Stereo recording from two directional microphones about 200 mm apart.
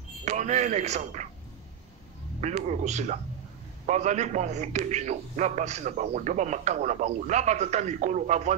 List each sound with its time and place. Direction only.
0.2 s a man's voice: 35° right (ahead or behind)
2.4 s a man's voice: 35° right (ahead or behind)